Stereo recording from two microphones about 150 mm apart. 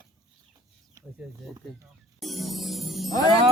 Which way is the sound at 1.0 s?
25° right (ahead or behind).